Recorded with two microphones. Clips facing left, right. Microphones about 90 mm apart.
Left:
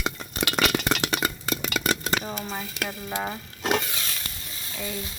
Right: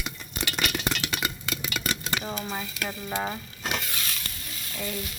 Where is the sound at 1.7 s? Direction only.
50° left (ahead or behind).